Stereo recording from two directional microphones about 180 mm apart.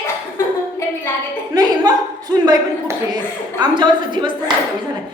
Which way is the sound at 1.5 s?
20° right (ahead or behind).